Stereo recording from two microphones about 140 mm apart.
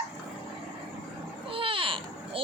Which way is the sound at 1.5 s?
40° right (ahead or behind).